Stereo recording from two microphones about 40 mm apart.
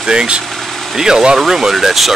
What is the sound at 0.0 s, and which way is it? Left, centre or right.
Speech, right.